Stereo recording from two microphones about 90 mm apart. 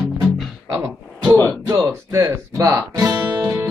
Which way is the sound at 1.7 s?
35° right (ahead or behind).